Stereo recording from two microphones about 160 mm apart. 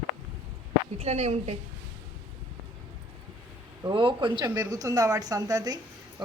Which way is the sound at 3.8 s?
30° right (ahead or behind).